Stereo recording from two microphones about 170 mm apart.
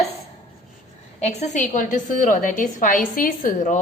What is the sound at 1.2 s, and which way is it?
A woman's voice, 40° left (ahead or behind).